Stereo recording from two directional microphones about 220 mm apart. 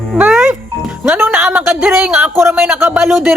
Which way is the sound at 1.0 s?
5° right (ahead or behind).